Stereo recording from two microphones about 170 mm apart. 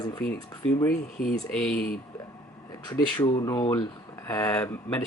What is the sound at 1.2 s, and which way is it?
Speech, 65° left (ahead or behind).